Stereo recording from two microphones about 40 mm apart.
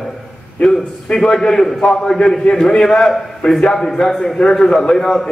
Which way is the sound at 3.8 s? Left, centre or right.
Centre.